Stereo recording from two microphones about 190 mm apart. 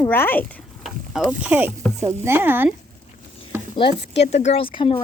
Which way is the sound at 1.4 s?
10° right (ahead or behind).